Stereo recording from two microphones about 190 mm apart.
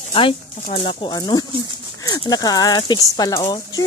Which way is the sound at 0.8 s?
25° left (ahead or behind).